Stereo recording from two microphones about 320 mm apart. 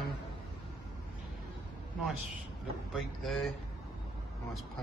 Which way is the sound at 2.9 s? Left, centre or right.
Centre.